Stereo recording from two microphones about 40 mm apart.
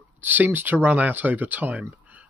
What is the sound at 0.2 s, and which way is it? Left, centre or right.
Speech, right.